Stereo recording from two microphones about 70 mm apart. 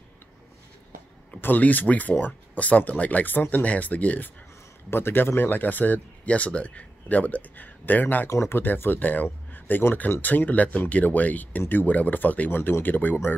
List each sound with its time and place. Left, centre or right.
1.4 s speech: left
4.9 s speech: left
8.3 s speech: left